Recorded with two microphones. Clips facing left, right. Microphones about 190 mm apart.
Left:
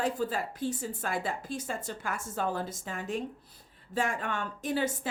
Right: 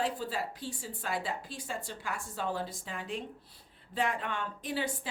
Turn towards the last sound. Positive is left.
turn(degrees=45)  # may be behind; listen again after turning